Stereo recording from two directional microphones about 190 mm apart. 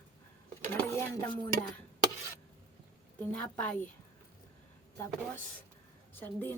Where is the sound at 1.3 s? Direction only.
25° left (ahead or behind).